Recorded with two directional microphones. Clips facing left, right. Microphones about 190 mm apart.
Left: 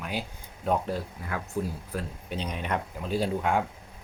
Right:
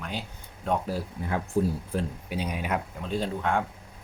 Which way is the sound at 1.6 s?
40° right (ahead or behind).